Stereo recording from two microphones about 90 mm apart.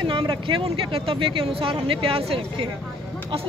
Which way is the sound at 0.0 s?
65° right (ahead or behind).